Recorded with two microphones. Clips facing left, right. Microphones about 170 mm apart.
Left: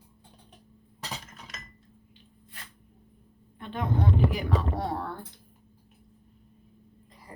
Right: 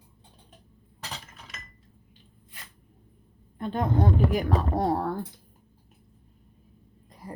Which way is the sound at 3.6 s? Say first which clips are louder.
Right 4 dB; 40° right (ahead or behind).